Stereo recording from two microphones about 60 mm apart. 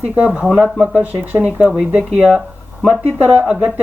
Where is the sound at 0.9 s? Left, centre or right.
Right.